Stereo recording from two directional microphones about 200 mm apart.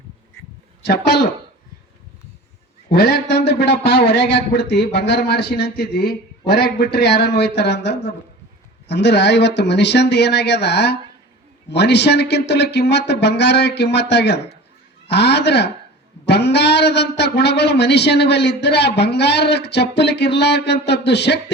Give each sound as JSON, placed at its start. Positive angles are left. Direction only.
{"t": 2.9, "sound": "a man's voice", "side_deg": 50}